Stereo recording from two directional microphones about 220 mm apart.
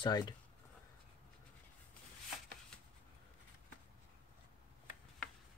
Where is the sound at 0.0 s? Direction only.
20° left (ahead or behind).